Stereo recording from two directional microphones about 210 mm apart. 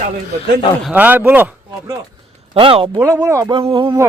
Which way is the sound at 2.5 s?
25° right (ahead or behind).